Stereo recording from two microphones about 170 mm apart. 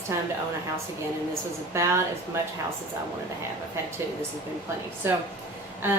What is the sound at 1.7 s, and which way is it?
Speech, 15° right (ahead or behind).